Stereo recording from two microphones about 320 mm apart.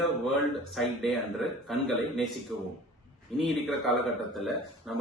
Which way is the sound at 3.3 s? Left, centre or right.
Centre.